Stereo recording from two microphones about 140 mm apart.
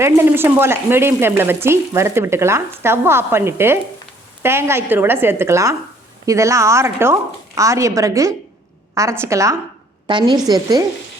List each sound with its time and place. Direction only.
0.0 s a woman's voice: 15° right (ahead or behind)
10.1 s a woman's voice: 35° right (ahead or behind)